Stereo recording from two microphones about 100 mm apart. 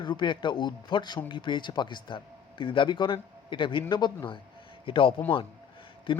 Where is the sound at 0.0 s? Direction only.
50° left (ahead or behind).